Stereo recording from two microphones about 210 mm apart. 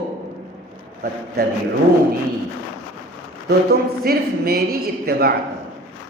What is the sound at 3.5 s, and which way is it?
A man's voice, 45° right (ahead or behind).